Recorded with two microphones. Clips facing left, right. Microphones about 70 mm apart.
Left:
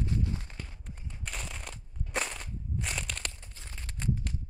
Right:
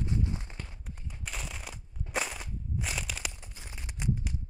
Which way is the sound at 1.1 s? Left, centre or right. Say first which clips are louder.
Even; centre.